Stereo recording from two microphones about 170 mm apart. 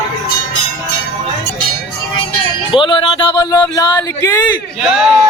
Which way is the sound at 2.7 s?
30° left (ahead or behind).